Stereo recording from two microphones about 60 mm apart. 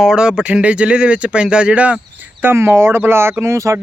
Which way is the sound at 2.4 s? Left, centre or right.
Right.